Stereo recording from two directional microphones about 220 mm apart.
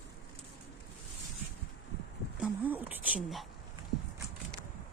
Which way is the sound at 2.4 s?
5° right (ahead or behind).